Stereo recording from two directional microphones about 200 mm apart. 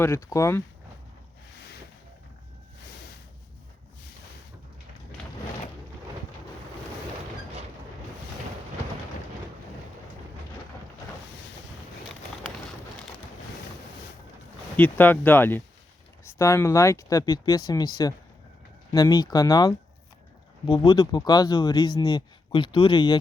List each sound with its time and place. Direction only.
0.0 s speech: 15° left (ahead or behind)
14.8 s speech: 10° left (ahead or behind)